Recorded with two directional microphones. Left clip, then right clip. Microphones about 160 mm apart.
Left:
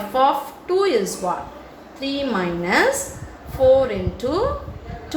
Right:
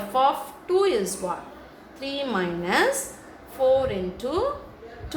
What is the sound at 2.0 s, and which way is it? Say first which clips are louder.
A woman's voice: left 4 dB; 20° left (ahead or behind).